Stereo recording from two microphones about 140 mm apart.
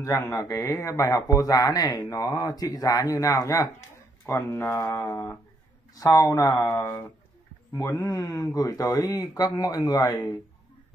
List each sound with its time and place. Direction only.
0.0 s speech: 20° left (ahead or behind)